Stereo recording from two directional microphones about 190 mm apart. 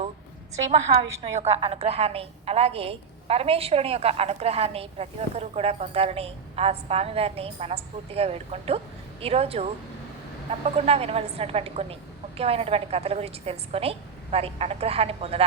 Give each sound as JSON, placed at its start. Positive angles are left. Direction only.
{"t": 1.2, "sound": "a woman's voice", "side_deg": -30}
{"t": 10.8, "sound": "a woman's voice", "side_deg": -30}